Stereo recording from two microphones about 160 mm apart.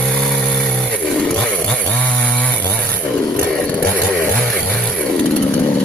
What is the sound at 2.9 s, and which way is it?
Vehicle, 5° left (ahead or behind).